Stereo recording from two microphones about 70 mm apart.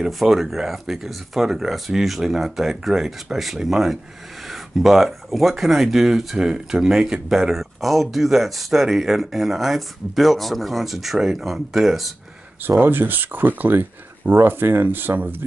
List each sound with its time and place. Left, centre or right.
0.0 s speech: centre
12.6 s speech: right